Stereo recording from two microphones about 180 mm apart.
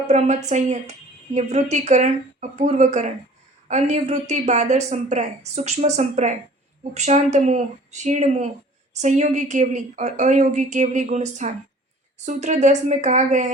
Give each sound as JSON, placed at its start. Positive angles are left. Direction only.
{"t": 0.1, "sound": "speech", "side_deg": -40}